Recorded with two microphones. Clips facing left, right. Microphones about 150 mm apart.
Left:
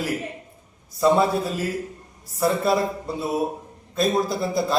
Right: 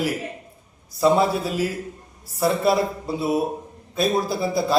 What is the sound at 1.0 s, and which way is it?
A man's voice, 5° right (ahead or behind).